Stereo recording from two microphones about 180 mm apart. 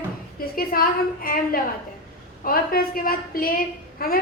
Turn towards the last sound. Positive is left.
turn(degrees=55)  # may be behind; listen again after turning